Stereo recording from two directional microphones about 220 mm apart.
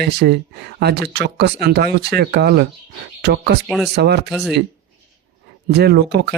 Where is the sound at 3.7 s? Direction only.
Centre (ahead or behind).